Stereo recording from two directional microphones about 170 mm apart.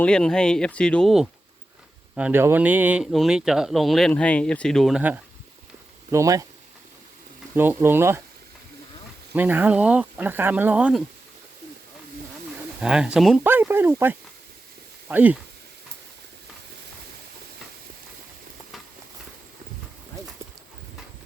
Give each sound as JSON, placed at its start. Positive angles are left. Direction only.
{"t": 0.0, "sound": "speech", "side_deg": 5}
{"t": 6.1, "sound": "speech", "side_deg": -20}
{"t": 7.5, "sound": "speech", "side_deg": -10}
{"t": 9.3, "sound": "speech", "side_deg": -10}
{"t": 12.8, "sound": "speech", "side_deg": -5}